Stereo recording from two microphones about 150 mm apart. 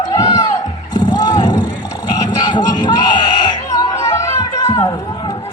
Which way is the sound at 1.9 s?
25° left (ahead or behind).